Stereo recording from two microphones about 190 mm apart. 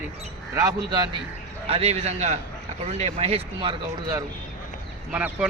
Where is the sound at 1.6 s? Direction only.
30° right (ahead or behind).